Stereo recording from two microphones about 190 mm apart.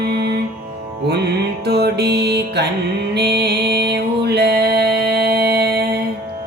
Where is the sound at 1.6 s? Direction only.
60° right (ahead or behind).